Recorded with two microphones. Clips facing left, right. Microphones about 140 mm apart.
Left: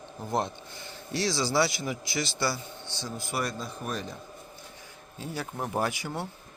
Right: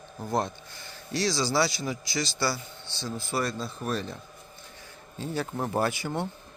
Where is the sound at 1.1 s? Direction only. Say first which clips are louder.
Right 1 dB; 25° left (ahead or behind).